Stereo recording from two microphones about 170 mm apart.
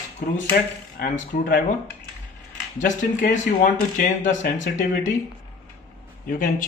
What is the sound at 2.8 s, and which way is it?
Speech, 50° left (ahead or behind).